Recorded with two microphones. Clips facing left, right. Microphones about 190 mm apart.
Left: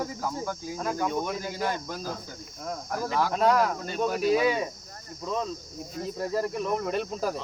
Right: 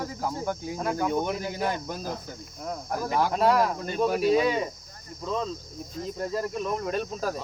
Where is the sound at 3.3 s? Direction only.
5° right (ahead or behind).